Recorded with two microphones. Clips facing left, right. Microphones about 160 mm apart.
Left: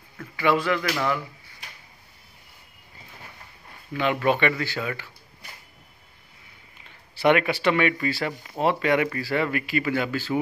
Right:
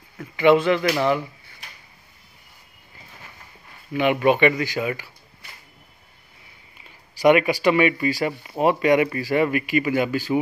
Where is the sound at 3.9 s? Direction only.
15° right (ahead or behind).